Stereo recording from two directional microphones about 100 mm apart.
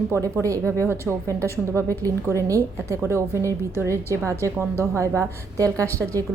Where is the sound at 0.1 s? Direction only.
30° right (ahead or behind).